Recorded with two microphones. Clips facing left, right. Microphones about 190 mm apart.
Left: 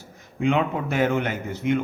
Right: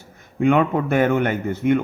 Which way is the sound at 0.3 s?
55° right (ahead or behind).